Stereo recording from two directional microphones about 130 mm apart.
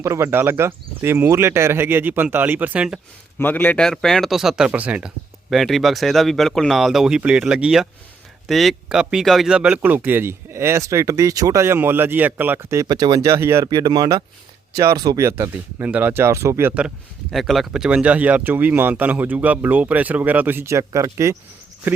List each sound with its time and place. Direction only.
0.0 s speech: 20° right (ahead or behind)
3.3 s a man's voice: 15° left (ahead or behind); by 13.7 s 20° right (ahead or behind)
13.7 s a man's voice: 30° right (ahead or behind); by 16.9 s 15° right (ahead or behind)
17.3 s speech: centre (ahead or behind); by 21.3 s 20° right (ahead or behind)